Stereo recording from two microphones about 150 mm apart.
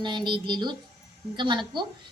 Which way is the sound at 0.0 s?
30° right (ahead or behind).